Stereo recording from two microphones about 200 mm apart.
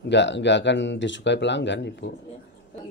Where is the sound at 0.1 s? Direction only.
60° left (ahead or behind).